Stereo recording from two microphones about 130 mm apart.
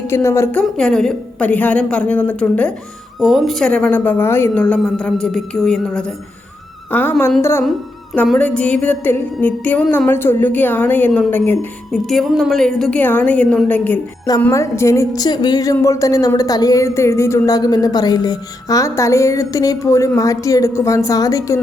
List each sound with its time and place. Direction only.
0.1 s a woman's voice: 20° left (ahead or behind)
0.8 s a woman's voice: 5° left (ahead or behind)
3.2 s a woman's voice: centre (ahead or behind)
6.9 s a woman's voice: 15° left (ahead or behind)
11.9 s a woman's voice: centre (ahead or behind)
14.5 s a woman's voice: 20° left (ahead or behind)